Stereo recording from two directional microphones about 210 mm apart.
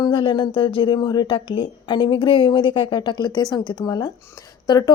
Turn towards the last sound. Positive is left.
turn(degrees=20)  # may be behind; listen again after turning